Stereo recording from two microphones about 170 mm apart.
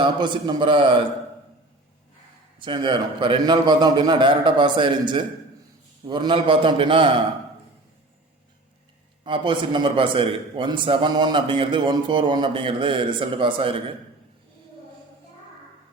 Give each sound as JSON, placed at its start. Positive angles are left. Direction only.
{"t": 0.0, "sound": "a man's voice", "side_deg": -30}
{"t": 2.6, "sound": "a man's voice", "side_deg": -30}
{"t": 9.2, "sound": "a man's voice", "side_deg": -30}